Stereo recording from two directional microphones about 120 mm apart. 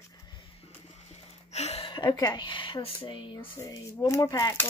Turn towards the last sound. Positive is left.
turn(degrees=30)  # may be behind; listen again after turning